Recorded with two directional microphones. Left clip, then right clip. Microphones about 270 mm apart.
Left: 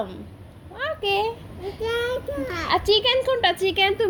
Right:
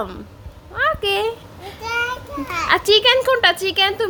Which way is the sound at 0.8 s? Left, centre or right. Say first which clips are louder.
Right 5 dB; centre.